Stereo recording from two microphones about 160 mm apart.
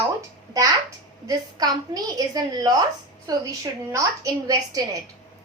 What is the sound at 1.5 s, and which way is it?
A woman's voice, 25° right (ahead or behind).